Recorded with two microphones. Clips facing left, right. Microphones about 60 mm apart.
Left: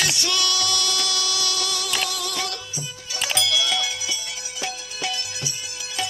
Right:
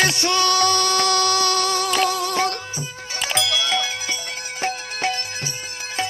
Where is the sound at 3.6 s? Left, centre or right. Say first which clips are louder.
Right 2 dB; right.